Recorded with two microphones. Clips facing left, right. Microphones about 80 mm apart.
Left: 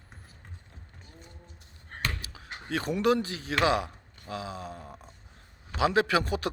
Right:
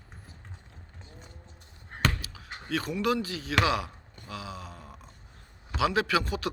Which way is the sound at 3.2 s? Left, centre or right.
Left.